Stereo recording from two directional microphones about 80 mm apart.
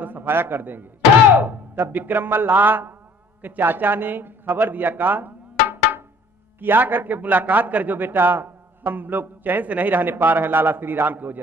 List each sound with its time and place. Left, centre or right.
0.0 s a man's voice: right